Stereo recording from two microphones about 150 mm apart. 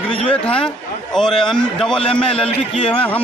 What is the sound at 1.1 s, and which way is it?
Speech, 5° left (ahead or behind).